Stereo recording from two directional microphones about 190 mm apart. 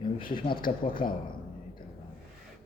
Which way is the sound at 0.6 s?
50° left (ahead or behind).